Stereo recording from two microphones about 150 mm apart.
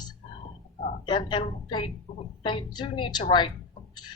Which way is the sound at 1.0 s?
30° left (ahead or behind).